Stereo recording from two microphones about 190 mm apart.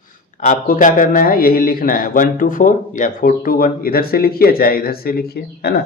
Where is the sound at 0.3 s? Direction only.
40° left (ahead or behind).